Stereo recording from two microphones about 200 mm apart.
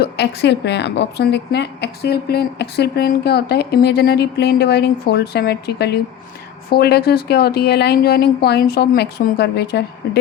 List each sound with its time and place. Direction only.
0.0 s a woman's voice: 60° left (ahead or behind)